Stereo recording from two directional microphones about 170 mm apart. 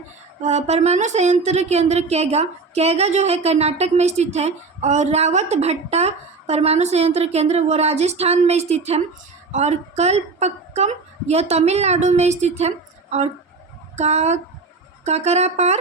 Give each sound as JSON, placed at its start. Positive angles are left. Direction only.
{"t": 0.4, "sound": "a woman's voice", "side_deg": -40}